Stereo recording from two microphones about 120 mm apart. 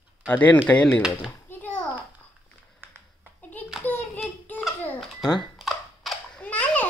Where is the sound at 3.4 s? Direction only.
15° left (ahead or behind).